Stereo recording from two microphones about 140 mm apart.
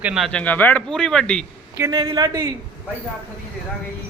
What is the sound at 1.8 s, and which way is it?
Speech, 25° right (ahead or behind).